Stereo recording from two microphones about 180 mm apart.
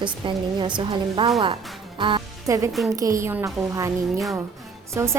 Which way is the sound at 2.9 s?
20° right (ahead or behind).